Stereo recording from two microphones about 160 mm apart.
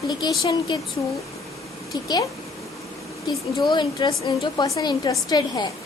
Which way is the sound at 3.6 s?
30° left (ahead or behind).